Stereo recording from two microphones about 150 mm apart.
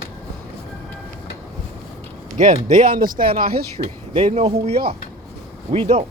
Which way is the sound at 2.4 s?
70° right (ahead or behind).